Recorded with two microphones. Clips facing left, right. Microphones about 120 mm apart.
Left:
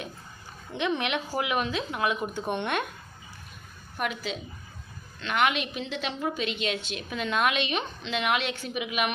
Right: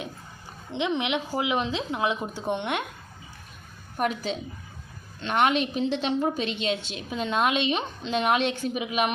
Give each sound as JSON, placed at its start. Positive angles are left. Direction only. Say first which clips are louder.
{"t": 0.7, "sound": "speech", "louder": "right 2 dB", "side_deg": -20}
{"t": 3.9, "sound": "a woman's voice", "louder": "right 4 dB", "side_deg": -35}